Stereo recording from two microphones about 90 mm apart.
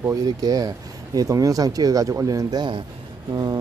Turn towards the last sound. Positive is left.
turn(degrees=-50)  # may be behind; listen again after turning